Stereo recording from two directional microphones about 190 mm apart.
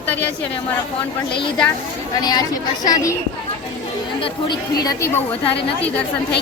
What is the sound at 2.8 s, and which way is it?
Speech, 15° left (ahead or behind).